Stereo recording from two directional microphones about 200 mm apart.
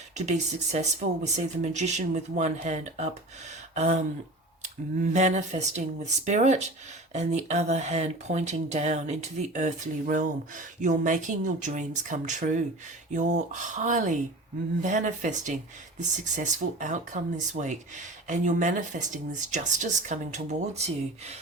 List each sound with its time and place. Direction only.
0.2 s speech: 35° right (ahead or behind)
5.1 s speech: 35° right (ahead or behind)